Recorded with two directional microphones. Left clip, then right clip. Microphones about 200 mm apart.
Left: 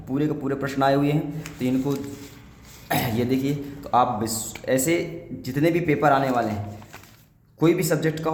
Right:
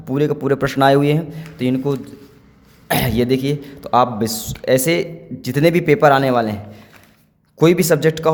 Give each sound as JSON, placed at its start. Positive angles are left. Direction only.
{"t": 0.1, "sound": "speech", "side_deg": -55}
{"t": 7.6, "sound": "speech", "side_deg": -55}